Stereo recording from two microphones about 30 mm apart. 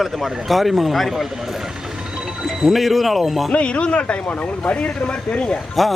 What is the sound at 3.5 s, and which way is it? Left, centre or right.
Speech, left.